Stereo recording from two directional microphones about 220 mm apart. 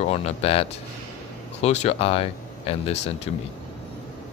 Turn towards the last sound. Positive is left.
turn(degrees=25)  # may be behind; listen again after turning